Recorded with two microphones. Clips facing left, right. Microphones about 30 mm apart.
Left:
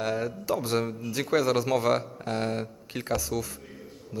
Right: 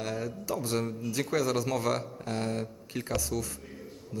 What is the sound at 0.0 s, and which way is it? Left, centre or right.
Speech, centre.